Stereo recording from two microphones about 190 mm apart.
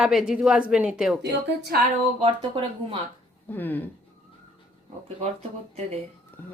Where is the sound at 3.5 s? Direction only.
10° left (ahead or behind).